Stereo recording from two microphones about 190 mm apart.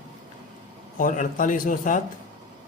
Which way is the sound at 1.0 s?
45° left (ahead or behind).